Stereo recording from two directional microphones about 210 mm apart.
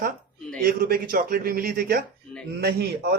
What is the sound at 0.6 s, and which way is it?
Speech, 45° right (ahead or behind).